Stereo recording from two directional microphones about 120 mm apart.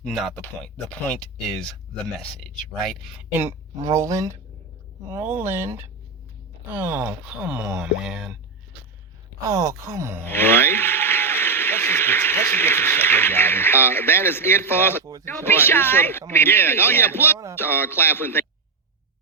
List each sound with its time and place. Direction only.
0.0 s speech: centre (ahead or behind)
0.3 s speech: 10° left (ahead or behind)
3.3 s speech: 20° right (ahead or behind); by 8.4 s 5° right (ahead or behind)
9.5 s speech: 30° right (ahead or behind)
10.2 s a man's voice: 20° left (ahead or behind)